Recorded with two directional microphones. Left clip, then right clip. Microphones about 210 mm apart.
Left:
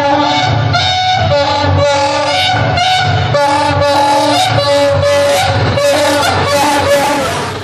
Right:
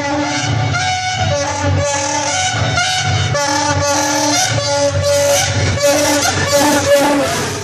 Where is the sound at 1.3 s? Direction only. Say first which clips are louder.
Left 6 dB; 10° left (ahead or behind).